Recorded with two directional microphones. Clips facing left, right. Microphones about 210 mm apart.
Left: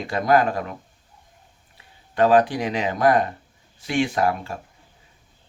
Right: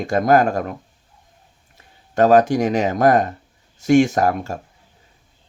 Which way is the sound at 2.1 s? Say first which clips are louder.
Right 4 dB; 45° right (ahead or behind).